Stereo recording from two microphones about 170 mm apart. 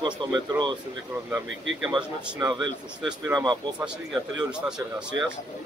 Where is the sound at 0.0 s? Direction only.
25° right (ahead or behind).